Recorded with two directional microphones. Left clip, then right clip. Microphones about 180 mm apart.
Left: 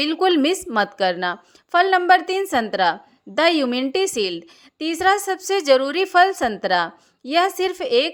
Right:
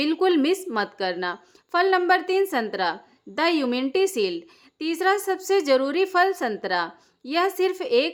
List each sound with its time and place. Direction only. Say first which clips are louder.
0.0 s a woman's voice: left 3 dB; 25° left (ahead or behind)